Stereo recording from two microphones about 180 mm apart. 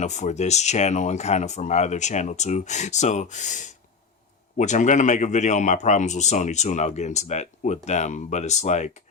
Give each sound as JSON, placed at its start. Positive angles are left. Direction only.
{"t": 0.0, "sound": "a man's voice", "side_deg": 40}